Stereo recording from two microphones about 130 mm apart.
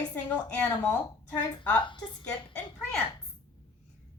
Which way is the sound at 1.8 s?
40° left (ahead or behind).